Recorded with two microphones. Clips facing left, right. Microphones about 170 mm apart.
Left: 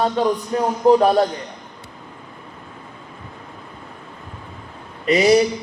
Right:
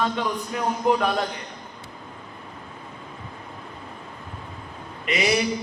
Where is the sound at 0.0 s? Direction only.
35° left (ahead or behind).